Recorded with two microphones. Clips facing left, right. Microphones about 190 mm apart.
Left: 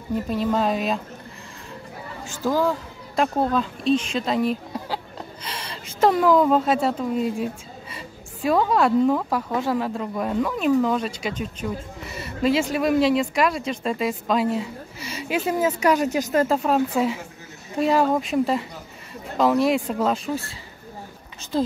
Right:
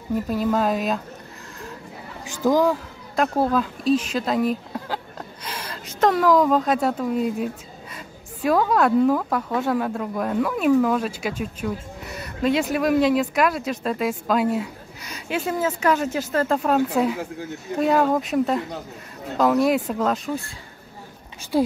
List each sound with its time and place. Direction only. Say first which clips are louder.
0.3 s speech: right 1 dB; 5° right (ahead or behind)
2.2 s speech: right 3 dB; 15° right (ahead or behind)
3.2 s a woman's voice: right 1 dB; 5° right (ahead or behind); by 16.4 s 15° left (ahead or behind)
16.4 s speech: even; centre (ahead or behind)
20.3 s speech: even; 10° left (ahead or behind)
21.5 s speech: right 3 dB; 10° right (ahead or behind)